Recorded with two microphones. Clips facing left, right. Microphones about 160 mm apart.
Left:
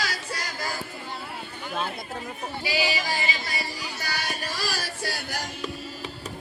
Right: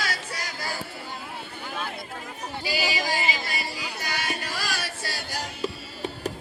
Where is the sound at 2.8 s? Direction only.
40° right (ahead or behind).